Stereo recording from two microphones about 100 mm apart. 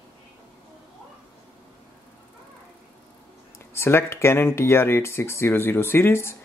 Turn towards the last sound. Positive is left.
turn(degrees=25)  # may be behind; listen again after turning